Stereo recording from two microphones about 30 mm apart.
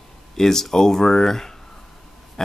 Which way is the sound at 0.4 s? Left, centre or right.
Centre.